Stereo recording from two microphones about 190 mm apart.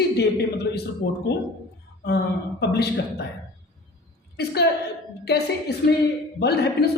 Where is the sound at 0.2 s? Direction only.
60° left (ahead or behind).